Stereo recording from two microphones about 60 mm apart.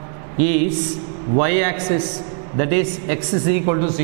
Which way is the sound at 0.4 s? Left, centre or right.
Centre.